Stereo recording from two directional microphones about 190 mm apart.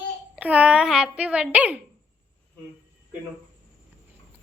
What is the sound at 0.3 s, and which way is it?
A child's voice, 5° right (ahead or behind).